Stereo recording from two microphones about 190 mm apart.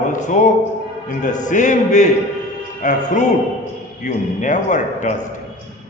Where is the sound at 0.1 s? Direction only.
40° left (ahead or behind).